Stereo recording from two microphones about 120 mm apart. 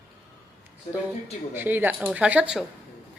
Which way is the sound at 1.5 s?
15° right (ahead or behind).